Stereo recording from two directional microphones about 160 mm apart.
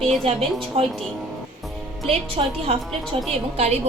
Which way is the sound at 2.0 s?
40° right (ahead or behind).